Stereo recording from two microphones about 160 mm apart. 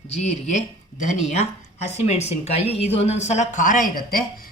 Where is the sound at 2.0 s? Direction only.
40° left (ahead or behind).